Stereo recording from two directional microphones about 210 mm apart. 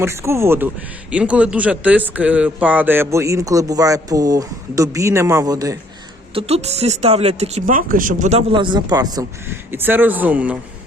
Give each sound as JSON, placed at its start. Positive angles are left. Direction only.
{"t": 0.0, "sound": "speech", "side_deg": -10}
{"t": 6.3, "sound": "speech", "side_deg": -30}